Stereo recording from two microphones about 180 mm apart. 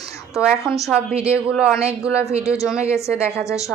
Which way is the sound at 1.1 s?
35° right (ahead or behind).